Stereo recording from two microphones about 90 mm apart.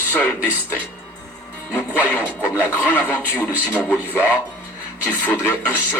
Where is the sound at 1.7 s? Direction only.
20° left (ahead or behind).